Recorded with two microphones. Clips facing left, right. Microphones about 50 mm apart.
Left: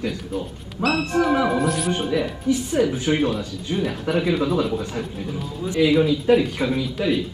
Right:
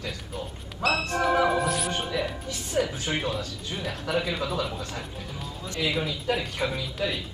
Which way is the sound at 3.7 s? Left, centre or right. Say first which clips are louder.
Left 6 dB; centre.